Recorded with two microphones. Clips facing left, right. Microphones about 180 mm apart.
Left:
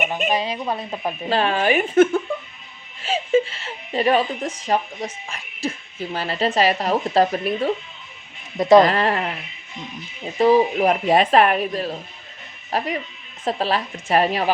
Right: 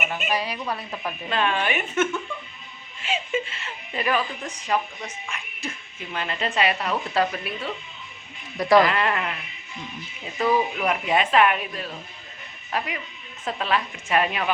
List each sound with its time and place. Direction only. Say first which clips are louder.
0.3 s speech: left 4 dB; 25° left (ahead or behind); by 7.7 s 40° left (ahead or behind)
8.5 s speech: left 5 dB; 20° left (ahead or behind)
8.8 s speech: left 4 dB; 35° left (ahead or behind)
10.3 s speech: left 7 dB; 35° left (ahead or behind)